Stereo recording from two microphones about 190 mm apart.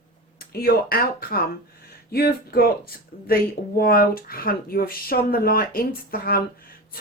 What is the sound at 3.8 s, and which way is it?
A woman's voice, 50° left (ahead or behind).